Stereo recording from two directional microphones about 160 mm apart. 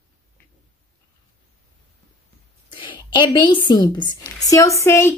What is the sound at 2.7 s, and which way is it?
Speech, 30° left (ahead or behind).